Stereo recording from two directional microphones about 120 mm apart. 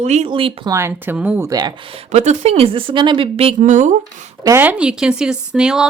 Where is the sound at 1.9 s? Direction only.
70° right (ahead or behind); by 3.5 s 50° right (ahead or behind).